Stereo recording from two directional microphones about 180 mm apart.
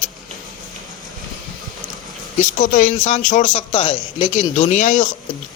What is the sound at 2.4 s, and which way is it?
A man's voice, 45° left (ahead or behind).